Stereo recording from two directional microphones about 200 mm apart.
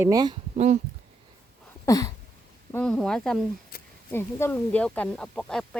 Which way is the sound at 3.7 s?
50° left (ahead or behind).